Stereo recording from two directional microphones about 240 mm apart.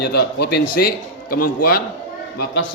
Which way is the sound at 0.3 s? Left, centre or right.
Left.